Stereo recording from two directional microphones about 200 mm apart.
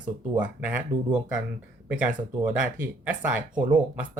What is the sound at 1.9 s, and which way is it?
Speech, 5° right (ahead or behind).